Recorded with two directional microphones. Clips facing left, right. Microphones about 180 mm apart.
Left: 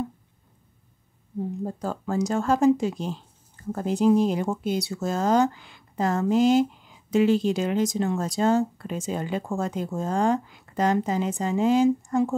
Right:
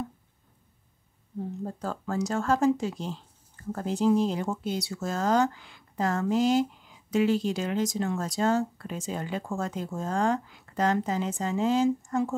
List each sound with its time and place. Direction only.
1.6 s speech: 15° left (ahead or behind)